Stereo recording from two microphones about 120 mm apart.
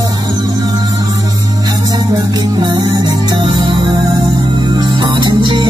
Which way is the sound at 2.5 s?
35° right (ahead or behind).